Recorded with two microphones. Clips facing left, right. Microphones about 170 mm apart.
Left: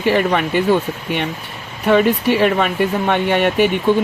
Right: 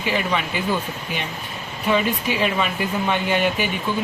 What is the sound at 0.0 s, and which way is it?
Speech, 60° left (ahead or behind).